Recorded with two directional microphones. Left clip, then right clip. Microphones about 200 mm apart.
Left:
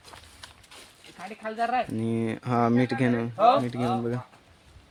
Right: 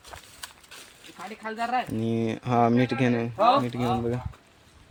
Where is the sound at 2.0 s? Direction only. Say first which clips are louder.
Right 1 dB; centre (ahead or behind).